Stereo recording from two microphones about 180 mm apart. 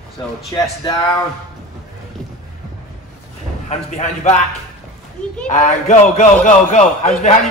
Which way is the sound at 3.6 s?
40° left (ahead or behind).